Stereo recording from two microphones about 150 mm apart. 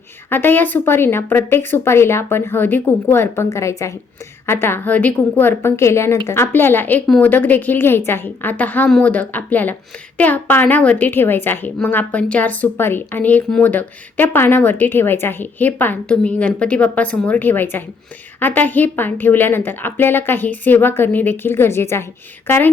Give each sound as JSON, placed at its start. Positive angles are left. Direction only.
{"t": 0.3, "sound": "a woman's voice", "side_deg": 15}